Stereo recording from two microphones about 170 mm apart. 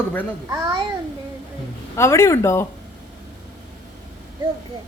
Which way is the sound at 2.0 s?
15° left (ahead or behind).